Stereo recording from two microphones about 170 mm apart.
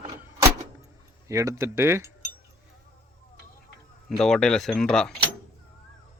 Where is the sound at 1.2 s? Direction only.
15° right (ahead or behind).